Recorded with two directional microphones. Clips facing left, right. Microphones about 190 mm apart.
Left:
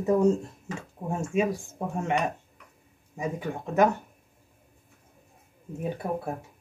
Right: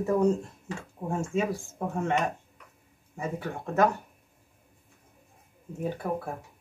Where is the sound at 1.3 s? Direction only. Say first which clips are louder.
Left 2 dB; 15° left (ahead or behind).